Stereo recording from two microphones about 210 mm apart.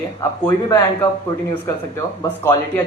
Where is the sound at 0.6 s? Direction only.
15° left (ahead or behind).